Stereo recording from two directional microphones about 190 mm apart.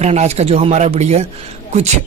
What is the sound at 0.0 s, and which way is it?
Speech, 35° right (ahead or behind).